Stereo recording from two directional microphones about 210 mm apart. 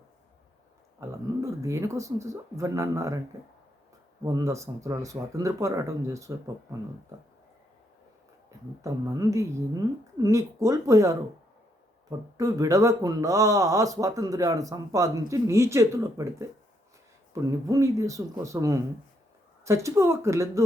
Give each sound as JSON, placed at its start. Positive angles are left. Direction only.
{"t": 0.9, "sound": "speech", "side_deg": -15}
{"t": 4.2, "sound": "speech", "side_deg": -15}
{"t": 8.8, "sound": "speech", "side_deg": -15}
{"t": 12.4, "sound": "speech", "side_deg": -15}